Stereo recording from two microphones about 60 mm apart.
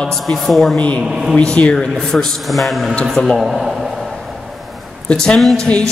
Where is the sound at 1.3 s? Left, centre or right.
Centre.